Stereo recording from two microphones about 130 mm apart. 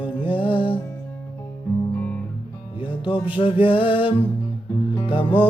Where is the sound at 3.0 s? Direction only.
40° left (ahead or behind).